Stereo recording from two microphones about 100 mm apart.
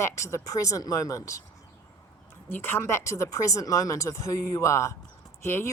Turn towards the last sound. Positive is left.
turn(degrees=25)  # may be behind; listen again after turning